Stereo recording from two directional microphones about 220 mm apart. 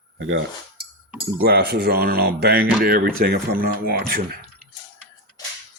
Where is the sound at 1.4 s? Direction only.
45° right (ahead or behind).